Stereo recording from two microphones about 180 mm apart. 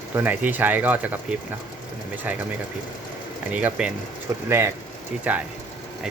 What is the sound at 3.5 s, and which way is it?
Speech, 10° right (ahead or behind).